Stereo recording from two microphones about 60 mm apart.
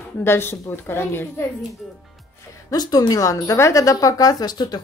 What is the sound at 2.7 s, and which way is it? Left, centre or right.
Speech, left.